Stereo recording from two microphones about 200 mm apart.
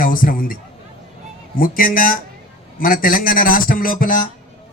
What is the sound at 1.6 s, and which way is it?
A man's voice, 45° left (ahead or behind).